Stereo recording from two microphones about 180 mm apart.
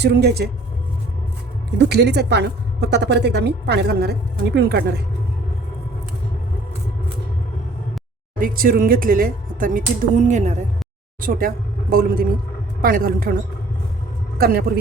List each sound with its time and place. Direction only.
0.0 s speech: 65° right (ahead or behind)
1.8 s a woman's voice: 65° right (ahead or behind)
8.4 s speech: 50° right (ahead or behind)
11.2 s speech: 50° right (ahead or behind)
14.3 s a man's voice: 55° right (ahead or behind)